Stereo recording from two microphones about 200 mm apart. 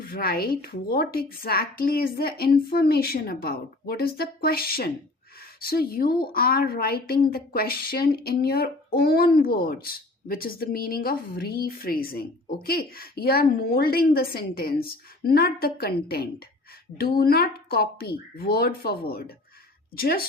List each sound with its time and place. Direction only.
0.0 s a woman's voice: 50° left (ahead or behind)